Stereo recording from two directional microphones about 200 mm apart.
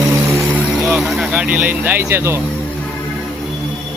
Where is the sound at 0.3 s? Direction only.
Centre (ahead or behind).